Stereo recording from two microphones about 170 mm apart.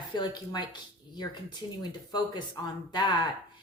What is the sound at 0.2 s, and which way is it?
A woman's voice, 25° left (ahead or behind).